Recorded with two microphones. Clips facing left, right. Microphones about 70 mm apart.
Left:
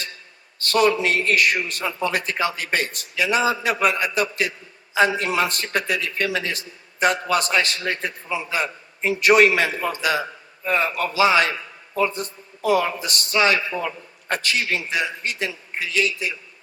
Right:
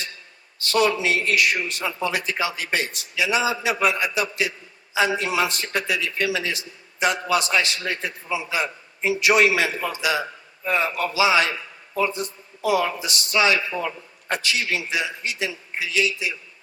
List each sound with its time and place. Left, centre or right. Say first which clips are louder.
0.6 s a man's voice: left 2 dB; left